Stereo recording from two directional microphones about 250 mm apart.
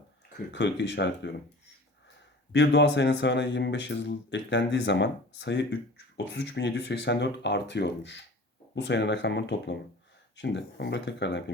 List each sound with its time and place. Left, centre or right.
0.3 s speech: left
2.5 s speech: left